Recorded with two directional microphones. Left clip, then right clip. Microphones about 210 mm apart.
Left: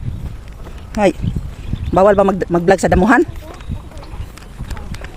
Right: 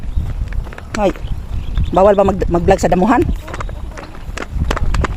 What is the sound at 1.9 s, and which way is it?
Speech, 10° left (ahead or behind).